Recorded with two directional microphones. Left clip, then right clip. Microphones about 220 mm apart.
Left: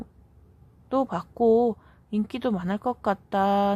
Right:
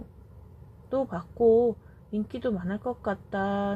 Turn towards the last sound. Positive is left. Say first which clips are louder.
# left 7 dB
turn(degrees=25)  # may be behind; listen again after turning